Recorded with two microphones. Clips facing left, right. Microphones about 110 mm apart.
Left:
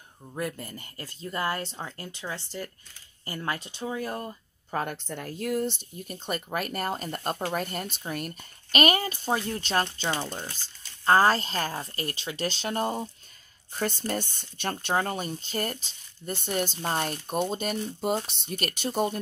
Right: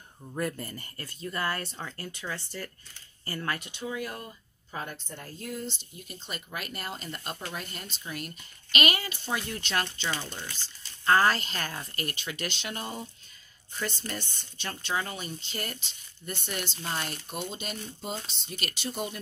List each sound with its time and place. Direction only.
0.3 s speech: 10° left (ahead or behind)
3.4 s speech: 30° left (ahead or behind)
4.6 s speech: 60° left (ahead or behind)